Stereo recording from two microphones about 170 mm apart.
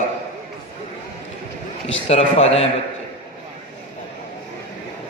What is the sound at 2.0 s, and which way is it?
Speech, 35° left (ahead or behind).